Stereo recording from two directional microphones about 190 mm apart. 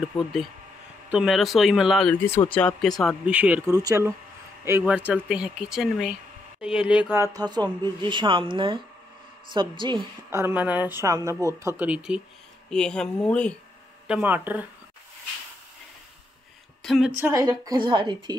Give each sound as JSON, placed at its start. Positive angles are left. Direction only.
{"t": 0.2, "sound": "speech", "side_deg": 0}
{"t": 10.3, "sound": "speech", "side_deg": -10}
{"t": 14.0, "sound": "speech", "side_deg": -5}
{"t": 16.8, "sound": "a woman's voice", "side_deg": 0}
{"t": 17.2, "sound": "speech", "side_deg": -15}